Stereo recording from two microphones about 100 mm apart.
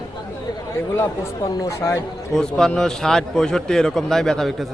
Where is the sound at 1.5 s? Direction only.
35° left (ahead or behind).